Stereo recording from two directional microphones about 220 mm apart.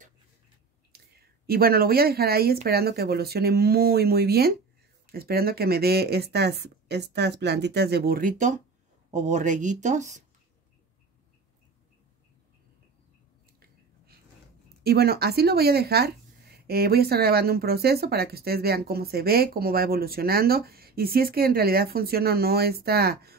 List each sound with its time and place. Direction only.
0.9 s a sound: 45° right (ahead or behind)
1.5 s speech: 45° right (ahead or behind)
14.8 s speech: 45° right (ahead or behind)